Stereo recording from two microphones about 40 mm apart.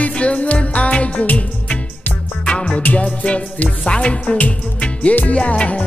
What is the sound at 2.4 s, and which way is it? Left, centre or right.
Music, left.